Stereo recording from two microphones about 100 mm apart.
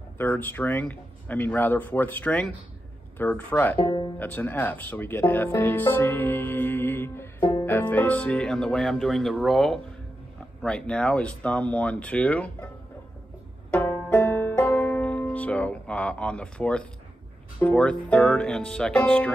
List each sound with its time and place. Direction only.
0.2 s speech: 20° left (ahead or behind)
3.8 s speech: 45° left (ahead or behind)
4.2 s speech: 20° left (ahead or behind)
13.7 s banjo: 15° left (ahead or behind)
14.0 s music: 20° left (ahead or behind)
17.6 s speech: 15° left (ahead or behind)